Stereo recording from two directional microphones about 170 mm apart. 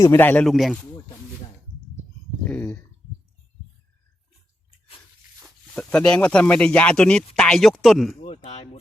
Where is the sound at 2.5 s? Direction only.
10° left (ahead or behind).